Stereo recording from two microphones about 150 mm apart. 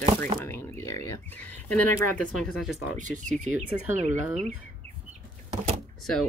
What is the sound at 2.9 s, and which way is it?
Speech, 55° right (ahead or behind).